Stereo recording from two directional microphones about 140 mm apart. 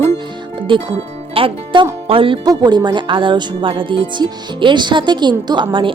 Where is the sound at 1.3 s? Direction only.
40° right (ahead or behind).